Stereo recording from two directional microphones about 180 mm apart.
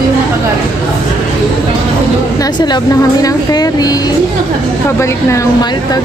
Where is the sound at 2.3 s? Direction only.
20° left (ahead or behind).